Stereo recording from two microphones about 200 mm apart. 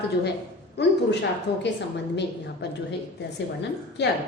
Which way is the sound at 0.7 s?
60° left (ahead or behind).